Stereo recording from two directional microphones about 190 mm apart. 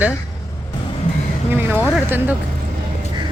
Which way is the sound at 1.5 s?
10° right (ahead or behind).